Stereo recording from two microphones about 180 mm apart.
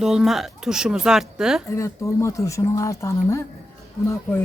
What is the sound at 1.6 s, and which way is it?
Speech, 15° left (ahead or behind).